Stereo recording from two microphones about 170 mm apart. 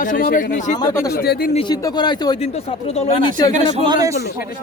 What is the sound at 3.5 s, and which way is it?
Speech, 45° right (ahead or behind).